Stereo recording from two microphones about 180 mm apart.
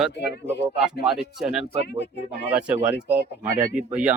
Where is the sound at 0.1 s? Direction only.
70° left (ahead or behind).